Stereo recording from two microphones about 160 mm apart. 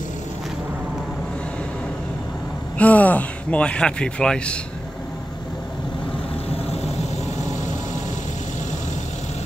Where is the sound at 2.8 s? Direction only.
10° left (ahead or behind).